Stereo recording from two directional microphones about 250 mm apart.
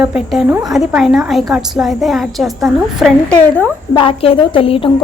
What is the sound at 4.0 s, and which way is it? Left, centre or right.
Speech, left.